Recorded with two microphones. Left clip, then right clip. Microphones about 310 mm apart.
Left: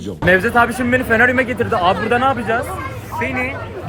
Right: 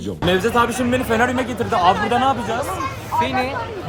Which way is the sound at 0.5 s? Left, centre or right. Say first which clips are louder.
Left 3 dB; centre.